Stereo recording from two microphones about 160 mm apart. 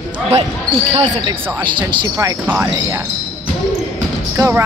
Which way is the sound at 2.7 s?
20° right (ahead or behind).